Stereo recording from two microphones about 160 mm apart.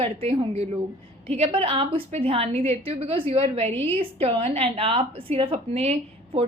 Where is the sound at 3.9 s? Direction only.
35° right (ahead or behind).